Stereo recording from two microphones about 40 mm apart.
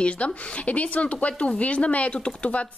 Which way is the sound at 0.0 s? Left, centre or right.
Left.